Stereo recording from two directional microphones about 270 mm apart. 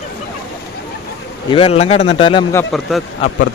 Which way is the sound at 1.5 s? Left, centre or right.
Left.